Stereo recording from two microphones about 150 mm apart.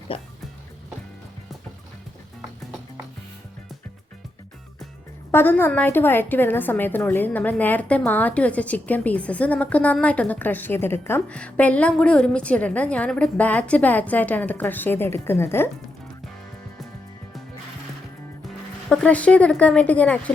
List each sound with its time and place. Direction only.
0.1 s speech: 35° left (ahead or behind)
5.3 s a woman's voice: 15° left (ahead or behind)
18.9 s a woman's voice: 10° left (ahead or behind)